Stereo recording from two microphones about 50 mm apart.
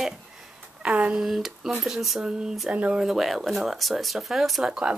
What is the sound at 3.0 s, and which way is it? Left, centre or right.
Speech, centre.